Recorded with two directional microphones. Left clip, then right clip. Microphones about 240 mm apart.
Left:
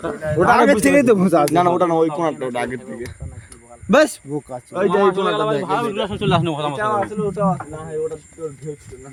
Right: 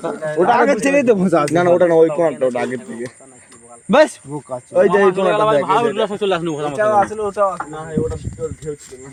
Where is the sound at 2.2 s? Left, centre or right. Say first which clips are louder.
Right 5 dB; left.